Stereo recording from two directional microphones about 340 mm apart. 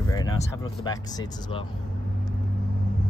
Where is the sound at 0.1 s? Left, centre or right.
Centre.